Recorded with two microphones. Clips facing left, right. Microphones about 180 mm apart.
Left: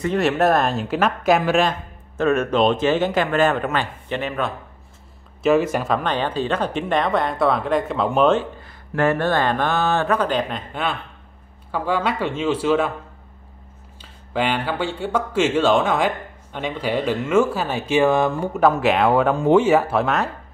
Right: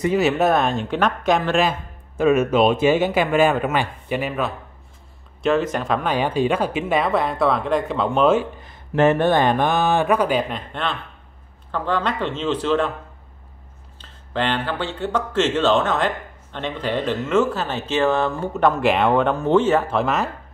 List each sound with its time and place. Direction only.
0.0 s speech: 5° right (ahead or behind)
1.6 s speech: 10° right (ahead or behind)
5.4 s speech: 5° left (ahead or behind)
6.0 s speech: 10° right (ahead or behind)
8.4 s speech: 20° right (ahead or behind)
10.7 s speech: 5° left (ahead or behind)
14.0 s speech: 10° left (ahead or behind)